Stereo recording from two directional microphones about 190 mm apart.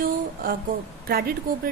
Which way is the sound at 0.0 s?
50° right (ahead or behind).